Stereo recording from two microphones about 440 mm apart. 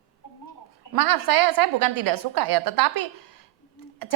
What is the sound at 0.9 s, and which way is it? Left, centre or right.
A woman's voice, right.